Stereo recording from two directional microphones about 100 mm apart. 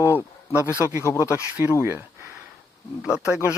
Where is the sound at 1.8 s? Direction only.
20° right (ahead or behind).